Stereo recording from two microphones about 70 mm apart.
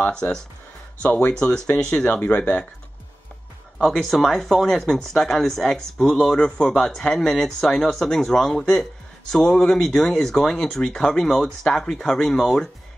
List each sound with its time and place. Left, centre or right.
0.0 s speech: centre
3.7 s speech: centre